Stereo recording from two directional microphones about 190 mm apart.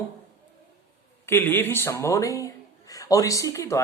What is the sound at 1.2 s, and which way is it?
Speech, 10° left (ahead or behind).